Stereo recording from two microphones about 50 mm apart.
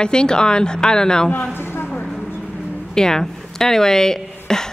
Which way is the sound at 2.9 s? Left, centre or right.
Centre.